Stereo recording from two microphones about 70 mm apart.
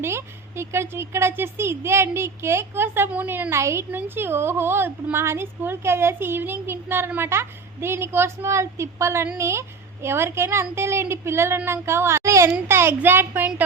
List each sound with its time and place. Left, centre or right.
0.0 s a woman's voice: right